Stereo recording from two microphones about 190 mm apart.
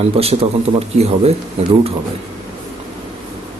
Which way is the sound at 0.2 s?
30° right (ahead or behind).